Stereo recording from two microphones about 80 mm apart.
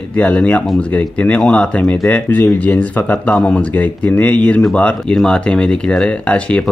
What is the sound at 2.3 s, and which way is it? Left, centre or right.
Speech, left.